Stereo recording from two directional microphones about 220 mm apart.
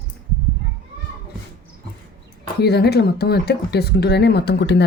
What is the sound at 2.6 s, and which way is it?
Speech, 45° left (ahead or behind).